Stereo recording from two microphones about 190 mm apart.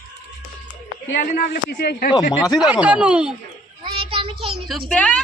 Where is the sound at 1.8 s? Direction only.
55° left (ahead or behind).